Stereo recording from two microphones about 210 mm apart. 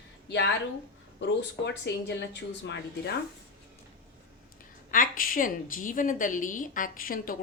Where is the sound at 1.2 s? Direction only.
55° left (ahead or behind).